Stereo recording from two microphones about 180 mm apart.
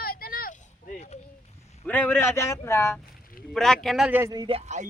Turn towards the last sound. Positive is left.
turn(degrees=-40)  # may be behind; listen again after turning